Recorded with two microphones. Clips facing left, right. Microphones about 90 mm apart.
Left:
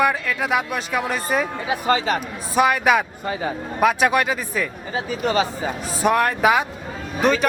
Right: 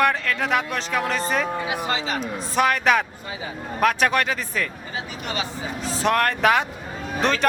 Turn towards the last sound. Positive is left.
turn(degrees=5)  # may be behind; listen again after turning